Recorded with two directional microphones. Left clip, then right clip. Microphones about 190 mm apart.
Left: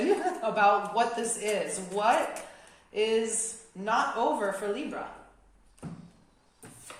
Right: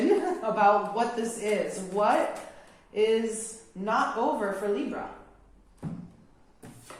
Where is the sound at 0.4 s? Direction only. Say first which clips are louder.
Right 1 dB; 35° left (ahead or behind).